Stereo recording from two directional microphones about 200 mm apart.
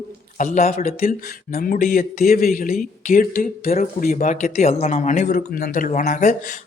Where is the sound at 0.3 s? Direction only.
40° left (ahead or behind).